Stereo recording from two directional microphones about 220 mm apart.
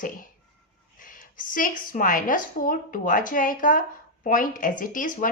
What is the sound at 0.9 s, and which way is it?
A woman's voice, 40° left (ahead or behind).